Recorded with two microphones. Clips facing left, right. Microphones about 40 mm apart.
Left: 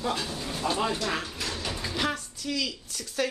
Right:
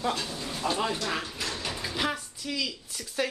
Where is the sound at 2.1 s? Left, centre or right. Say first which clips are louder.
Left 2 dB; centre.